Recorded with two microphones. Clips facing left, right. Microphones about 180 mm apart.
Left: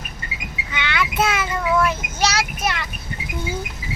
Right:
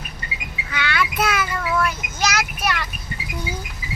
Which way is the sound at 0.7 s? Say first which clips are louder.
Right 1 dB; 20° left (ahead or behind).